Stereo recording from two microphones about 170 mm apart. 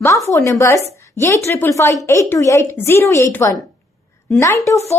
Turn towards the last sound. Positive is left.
turn(degrees=15)  # may be behind; listen again after turning